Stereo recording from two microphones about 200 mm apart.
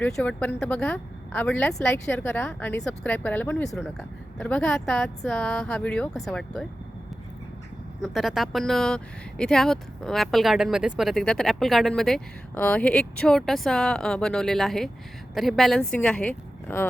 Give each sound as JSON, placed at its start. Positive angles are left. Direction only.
{"t": 0.0, "sound": "speech", "side_deg": 5}
{"t": 8.0, "sound": "speech", "side_deg": 0}